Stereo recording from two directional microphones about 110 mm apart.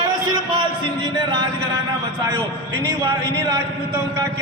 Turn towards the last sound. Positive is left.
turn(degrees=-35)  # may be behind; listen again after turning